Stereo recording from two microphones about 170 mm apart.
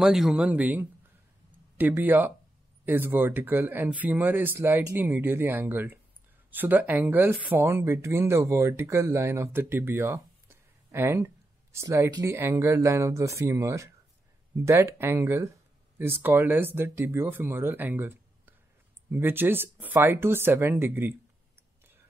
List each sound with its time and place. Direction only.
0.0 s speech: 5° right (ahead or behind)